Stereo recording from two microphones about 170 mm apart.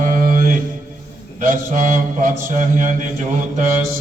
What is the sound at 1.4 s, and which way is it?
Mantra, 50° right (ahead or behind).